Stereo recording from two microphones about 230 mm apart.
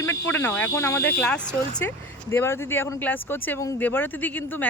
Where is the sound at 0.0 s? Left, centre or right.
Centre.